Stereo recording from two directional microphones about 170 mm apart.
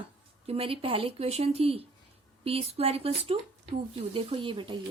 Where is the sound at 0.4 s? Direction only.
35° right (ahead or behind).